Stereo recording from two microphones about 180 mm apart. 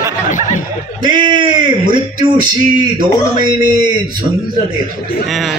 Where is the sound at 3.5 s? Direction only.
25° right (ahead or behind).